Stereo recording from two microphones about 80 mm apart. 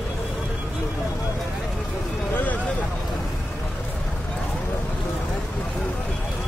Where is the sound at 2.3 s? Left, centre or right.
Centre.